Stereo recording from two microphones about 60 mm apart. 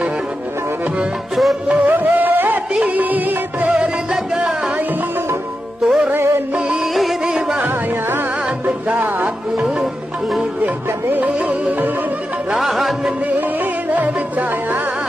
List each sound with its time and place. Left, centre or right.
1.3 s music: centre
1.7 s music: right
3.7 s music: centre
5.9 s music: centre
6.1 s music: right
6.5 s music: centre
6.9 s music: centre
7.5 s music: right
12.7 s music: centre
13.4 s music: right